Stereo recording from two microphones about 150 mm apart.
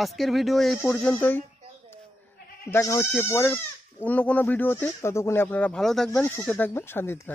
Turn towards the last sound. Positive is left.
turn(degrees=15)  # may be behind; listen again after turning